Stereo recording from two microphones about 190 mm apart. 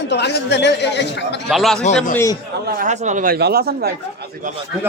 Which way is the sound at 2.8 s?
40° right (ahead or behind).